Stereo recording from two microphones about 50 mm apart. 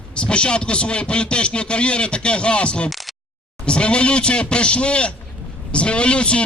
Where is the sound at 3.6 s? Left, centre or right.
Left.